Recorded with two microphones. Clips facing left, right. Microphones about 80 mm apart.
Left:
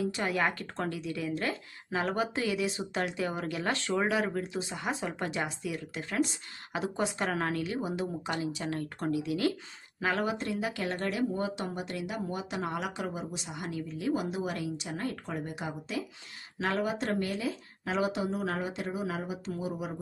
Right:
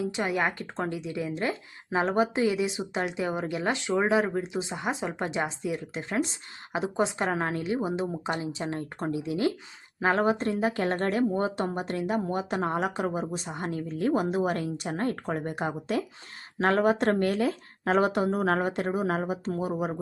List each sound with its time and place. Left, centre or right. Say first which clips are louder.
0.0 s speech: right 2 dB; right